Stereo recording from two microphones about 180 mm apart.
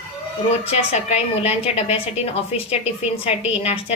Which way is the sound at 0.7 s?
35° left (ahead or behind).